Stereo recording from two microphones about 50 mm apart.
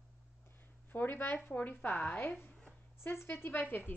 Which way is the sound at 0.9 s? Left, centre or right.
Left.